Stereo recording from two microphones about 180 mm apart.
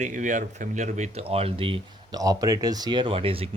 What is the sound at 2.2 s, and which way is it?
Speech, 20° right (ahead or behind).